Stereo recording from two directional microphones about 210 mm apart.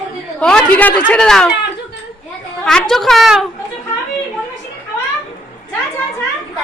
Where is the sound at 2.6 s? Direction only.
Centre (ahead or behind).